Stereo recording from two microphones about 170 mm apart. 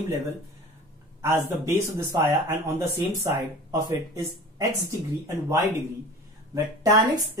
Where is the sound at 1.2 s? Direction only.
15° right (ahead or behind).